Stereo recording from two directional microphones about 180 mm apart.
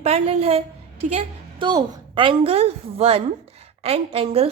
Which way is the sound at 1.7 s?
25° right (ahead or behind).